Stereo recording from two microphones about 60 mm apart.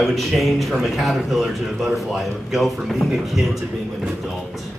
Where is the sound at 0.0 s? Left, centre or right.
Centre.